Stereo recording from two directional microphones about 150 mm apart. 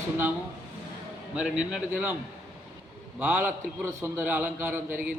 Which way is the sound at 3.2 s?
10° right (ahead or behind).